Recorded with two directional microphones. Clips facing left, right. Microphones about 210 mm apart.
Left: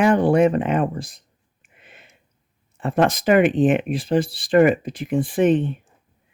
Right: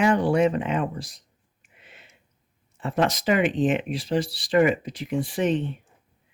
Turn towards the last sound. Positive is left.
turn(degrees=55)  # may be behind; listen again after turning